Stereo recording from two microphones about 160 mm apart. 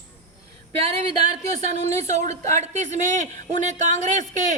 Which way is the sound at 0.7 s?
40° right (ahead or behind).